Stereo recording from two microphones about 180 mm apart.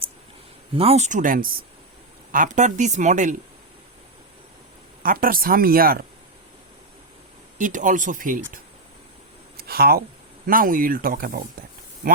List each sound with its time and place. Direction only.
0.7 s speech: 30° right (ahead or behind)
5.0 s speech: 50° right (ahead or behind)
7.6 s speech: 45° right (ahead or behind)
9.6 s a sound: 60° right (ahead or behind)
10.4 s speech: 50° right (ahead or behind)